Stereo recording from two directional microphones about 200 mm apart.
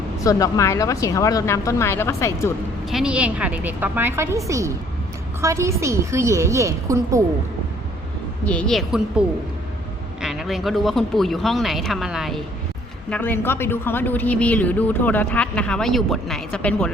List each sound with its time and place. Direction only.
0.3 s a woman's voice: 15° left (ahead or behind)
2.8 s a woman's voice: 5° right (ahead or behind)
8.4 s speech: 5° left (ahead or behind)
10.2 s a woman's voice: centre (ahead or behind)